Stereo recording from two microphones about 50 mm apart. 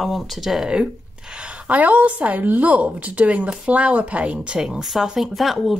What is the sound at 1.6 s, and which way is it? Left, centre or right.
A woman's voice, right.